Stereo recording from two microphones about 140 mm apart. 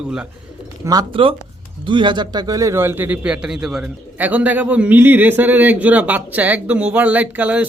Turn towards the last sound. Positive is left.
turn(degrees=-10)  # may be behind; listen again after turning